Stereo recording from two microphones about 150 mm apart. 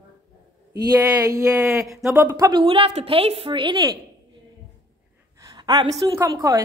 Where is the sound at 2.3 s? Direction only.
30° right (ahead or behind).